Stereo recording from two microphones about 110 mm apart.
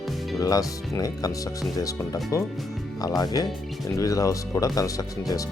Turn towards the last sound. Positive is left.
turn(degrees=35)  # may be behind; listen again after turning